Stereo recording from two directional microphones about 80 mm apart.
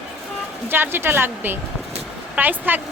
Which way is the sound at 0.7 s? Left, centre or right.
Right.